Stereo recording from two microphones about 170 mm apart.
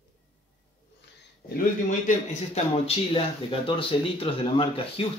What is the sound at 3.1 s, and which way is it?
Speech, 30° left (ahead or behind).